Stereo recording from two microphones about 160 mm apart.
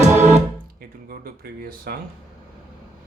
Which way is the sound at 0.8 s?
65° right (ahead or behind).